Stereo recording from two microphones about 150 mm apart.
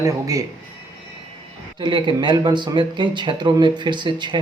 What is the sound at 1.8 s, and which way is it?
Speech, 30° right (ahead or behind).